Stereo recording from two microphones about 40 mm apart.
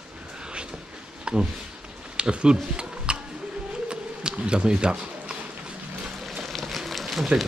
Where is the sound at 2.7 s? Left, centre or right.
Right.